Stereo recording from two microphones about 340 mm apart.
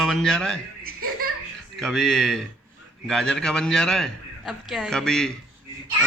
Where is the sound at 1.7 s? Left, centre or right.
Centre.